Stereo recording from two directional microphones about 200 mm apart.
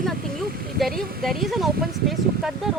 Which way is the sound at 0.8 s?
Centre (ahead or behind).